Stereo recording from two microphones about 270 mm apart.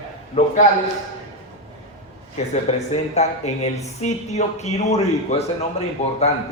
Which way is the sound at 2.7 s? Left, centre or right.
Left.